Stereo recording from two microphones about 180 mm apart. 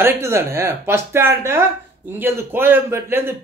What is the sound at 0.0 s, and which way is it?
Speech, 15° right (ahead or behind).